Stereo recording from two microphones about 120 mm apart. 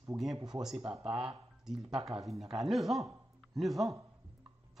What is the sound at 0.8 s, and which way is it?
Speech, 45° right (ahead or behind).